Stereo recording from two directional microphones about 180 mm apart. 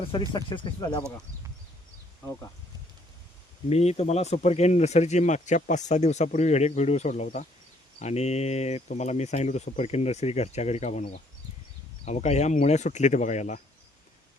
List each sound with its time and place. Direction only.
0.0 s speech: 30° left (ahead or behind)
3.7 s speech: 35° left (ahead or behind)